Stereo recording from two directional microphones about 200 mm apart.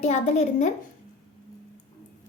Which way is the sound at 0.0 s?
35° left (ahead or behind).